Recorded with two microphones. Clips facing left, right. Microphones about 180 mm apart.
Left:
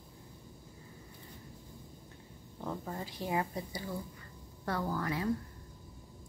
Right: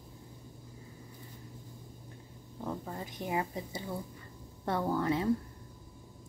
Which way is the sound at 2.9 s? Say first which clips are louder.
Left 1 dB; 20° right (ahead or behind).